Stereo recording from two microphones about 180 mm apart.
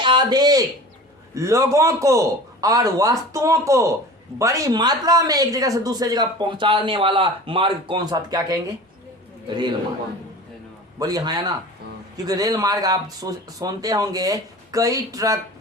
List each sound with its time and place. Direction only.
0.0 s a man's voice: 25° right (ahead or behind)
11.0 s speech: 20° right (ahead or behind)